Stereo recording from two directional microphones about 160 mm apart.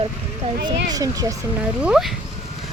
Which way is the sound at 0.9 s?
20° right (ahead or behind).